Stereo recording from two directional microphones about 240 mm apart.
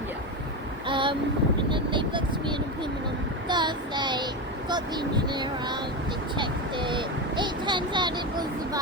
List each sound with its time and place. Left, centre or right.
0.9 s boat: right
1.7 s vehicle: centre
3.5 s child singing: centre
4.7 s speech: centre